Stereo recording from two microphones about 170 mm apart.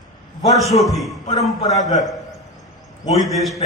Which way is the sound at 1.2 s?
20° left (ahead or behind).